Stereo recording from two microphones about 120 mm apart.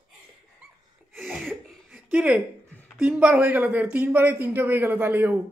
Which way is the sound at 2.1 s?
5° right (ahead or behind).